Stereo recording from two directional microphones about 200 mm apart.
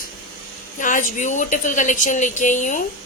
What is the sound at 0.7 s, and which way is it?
A woman's voice, 40° left (ahead or behind).